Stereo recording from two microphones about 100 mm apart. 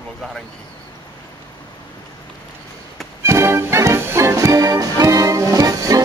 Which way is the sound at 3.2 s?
30° right (ahead or behind).